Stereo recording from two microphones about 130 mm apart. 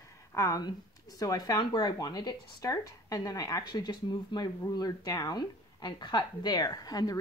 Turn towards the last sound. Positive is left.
turn(degrees=30)  # may be behind; listen again after turning